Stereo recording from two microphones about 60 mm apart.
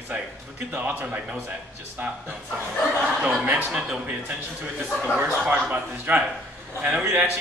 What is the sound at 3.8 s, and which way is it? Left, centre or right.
Speech, right.